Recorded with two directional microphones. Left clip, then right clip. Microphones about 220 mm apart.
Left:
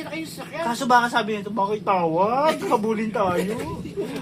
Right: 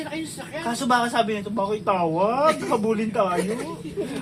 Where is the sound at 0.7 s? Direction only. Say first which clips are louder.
Left 3 dB; 25° left (ahead or behind).